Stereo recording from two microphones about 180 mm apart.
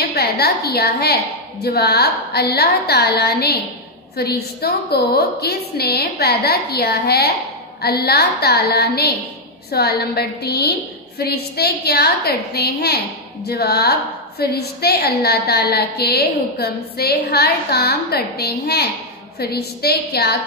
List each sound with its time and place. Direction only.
0.1 s a woman's voice: 60° left (ahead or behind)